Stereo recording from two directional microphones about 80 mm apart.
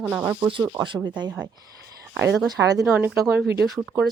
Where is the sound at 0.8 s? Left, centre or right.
Right.